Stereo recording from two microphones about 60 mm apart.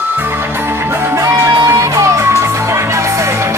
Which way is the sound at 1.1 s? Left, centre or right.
Right.